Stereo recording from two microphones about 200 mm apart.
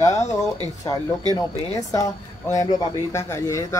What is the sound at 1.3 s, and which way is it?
Speech, 15° left (ahead or behind).